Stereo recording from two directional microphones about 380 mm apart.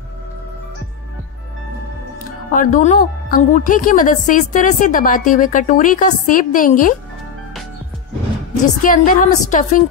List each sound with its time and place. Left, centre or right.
2.5 s a woman's voice: left
8.8 s a woman's voice: left